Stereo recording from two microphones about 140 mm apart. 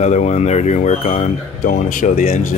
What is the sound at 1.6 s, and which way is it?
Speech, 70° left (ahead or behind).